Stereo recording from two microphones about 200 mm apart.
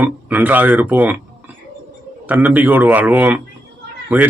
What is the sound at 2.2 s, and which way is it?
A man's voice, 10° right (ahead or behind).